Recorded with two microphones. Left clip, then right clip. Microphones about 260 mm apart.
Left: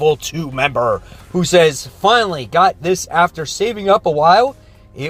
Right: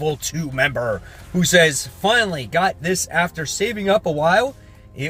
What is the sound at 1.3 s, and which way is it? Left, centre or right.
Speech, centre.